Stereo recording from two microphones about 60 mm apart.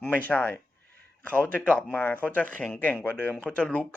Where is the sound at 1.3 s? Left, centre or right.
Left.